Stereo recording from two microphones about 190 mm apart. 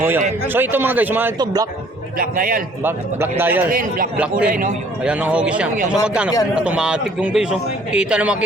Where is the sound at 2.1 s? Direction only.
50° right (ahead or behind).